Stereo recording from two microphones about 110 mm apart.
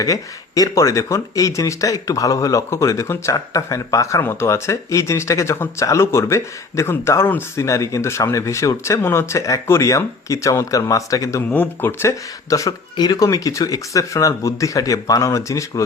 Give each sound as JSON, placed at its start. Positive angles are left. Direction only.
{"t": 0.0, "sound": "speech", "side_deg": 30}
{"t": 11.4, "sound": "speech", "side_deg": 15}